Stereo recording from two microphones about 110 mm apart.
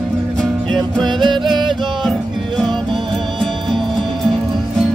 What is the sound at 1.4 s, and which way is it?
Music, centre (ahead or behind).